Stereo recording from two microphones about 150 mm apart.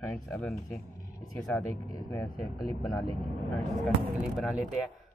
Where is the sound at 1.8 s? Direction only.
25° left (ahead or behind).